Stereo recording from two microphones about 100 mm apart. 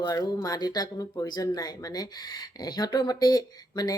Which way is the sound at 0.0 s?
40° left (ahead or behind).